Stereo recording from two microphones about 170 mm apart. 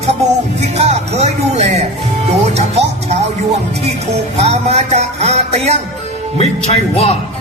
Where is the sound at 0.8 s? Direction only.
40° right (ahead or behind).